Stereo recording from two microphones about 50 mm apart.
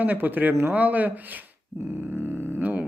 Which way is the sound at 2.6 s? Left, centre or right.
Right.